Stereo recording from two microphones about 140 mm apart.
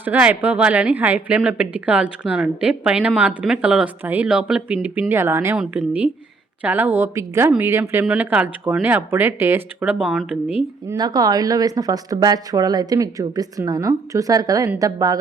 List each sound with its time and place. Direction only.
0.0 s a woman's voice: 15° right (ahead or behind)
10.9 s speech: 30° right (ahead or behind)